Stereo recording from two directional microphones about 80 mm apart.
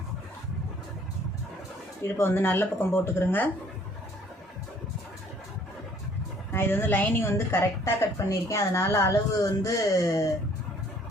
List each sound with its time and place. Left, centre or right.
2.0 s speech: left
6.5 s speech: left